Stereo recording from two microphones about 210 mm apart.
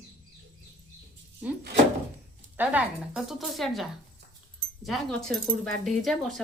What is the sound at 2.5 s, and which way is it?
A woman's voice, 5° right (ahead or behind).